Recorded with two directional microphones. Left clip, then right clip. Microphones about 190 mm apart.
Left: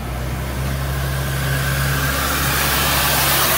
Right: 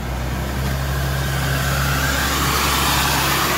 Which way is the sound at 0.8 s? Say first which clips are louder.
Right 1 dB; 5° left (ahead or behind).